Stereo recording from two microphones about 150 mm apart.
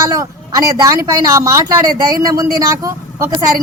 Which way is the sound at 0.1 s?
25° right (ahead or behind).